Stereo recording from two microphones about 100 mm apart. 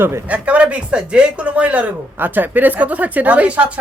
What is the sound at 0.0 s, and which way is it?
Speech, 25° right (ahead or behind).